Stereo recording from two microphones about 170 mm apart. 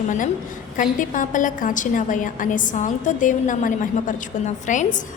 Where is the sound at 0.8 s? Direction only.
50° left (ahead or behind).